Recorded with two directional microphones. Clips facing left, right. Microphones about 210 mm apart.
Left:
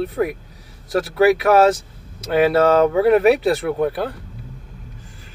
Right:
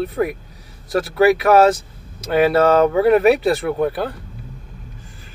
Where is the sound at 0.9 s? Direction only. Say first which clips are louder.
Even; 25° left (ahead or behind).